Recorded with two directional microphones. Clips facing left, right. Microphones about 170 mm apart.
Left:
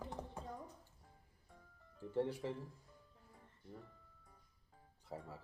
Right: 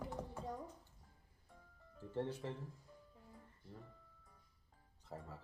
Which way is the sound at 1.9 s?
10° left (ahead or behind).